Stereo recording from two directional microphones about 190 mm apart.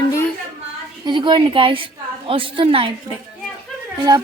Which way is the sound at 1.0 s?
25° right (ahead or behind).